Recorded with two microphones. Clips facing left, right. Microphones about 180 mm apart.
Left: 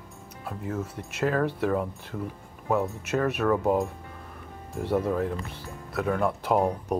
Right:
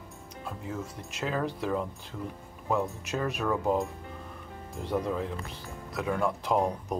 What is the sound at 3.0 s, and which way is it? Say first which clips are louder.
Speech: left 5 dB; 65° left (ahead or behind).